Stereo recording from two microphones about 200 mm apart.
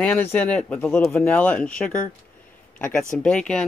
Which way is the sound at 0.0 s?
10° left (ahead or behind).